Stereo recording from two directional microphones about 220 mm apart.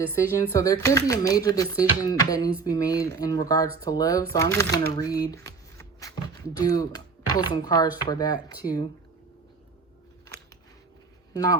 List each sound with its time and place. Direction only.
0.1 s speech: 15° left (ahead or behind)